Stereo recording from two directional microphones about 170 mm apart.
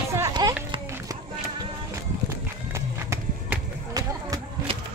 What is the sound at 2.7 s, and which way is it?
Run, 15° right (ahead or behind).